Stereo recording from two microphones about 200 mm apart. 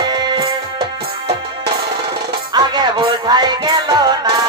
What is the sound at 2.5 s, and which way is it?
Music, 20° right (ahead or behind).